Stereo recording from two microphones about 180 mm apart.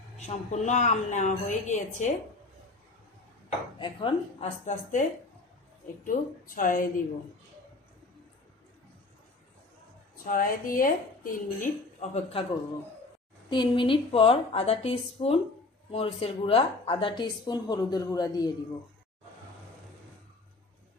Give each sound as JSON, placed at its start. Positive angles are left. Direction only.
{"t": 0.2, "sound": "a woman's voice", "side_deg": 40}
{"t": 3.8, "sound": "a woman's voice", "side_deg": 30}
{"t": 4.6, "sound": "a woman's voice", "side_deg": 40}
{"t": 6.1, "sound": "speech", "side_deg": 50}
{"t": 10.2, "sound": "speech", "side_deg": 50}
{"t": 11.9, "sound": "a woman's voice", "side_deg": 35}
{"t": 13.5, "sound": "a woman's voice", "side_deg": 25}